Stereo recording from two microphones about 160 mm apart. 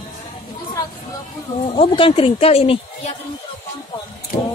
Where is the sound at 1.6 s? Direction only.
35° left (ahead or behind).